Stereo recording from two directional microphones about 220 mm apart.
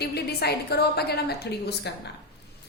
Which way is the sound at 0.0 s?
45° left (ahead or behind).